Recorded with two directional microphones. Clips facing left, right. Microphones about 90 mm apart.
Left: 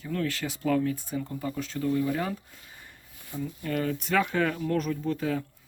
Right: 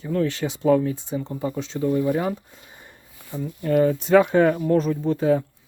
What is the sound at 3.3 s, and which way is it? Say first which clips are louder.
Speech: right 10 dB; 25° right (ahead or behind).